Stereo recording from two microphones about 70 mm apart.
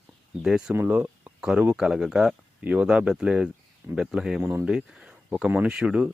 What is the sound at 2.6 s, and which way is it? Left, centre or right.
Speech, right.